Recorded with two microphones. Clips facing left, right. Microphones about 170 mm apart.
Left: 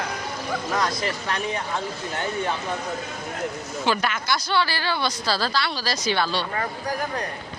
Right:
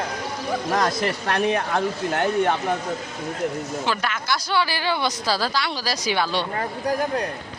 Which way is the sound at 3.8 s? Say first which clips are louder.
Left 5 dB; centre (ahead or behind).